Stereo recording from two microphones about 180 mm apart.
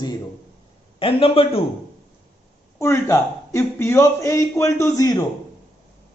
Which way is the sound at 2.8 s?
15° left (ahead or behind).